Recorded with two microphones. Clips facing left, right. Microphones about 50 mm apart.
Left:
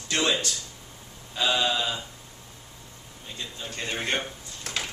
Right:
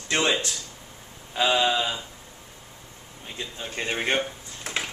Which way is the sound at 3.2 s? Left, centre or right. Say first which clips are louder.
Right 2 dB; right.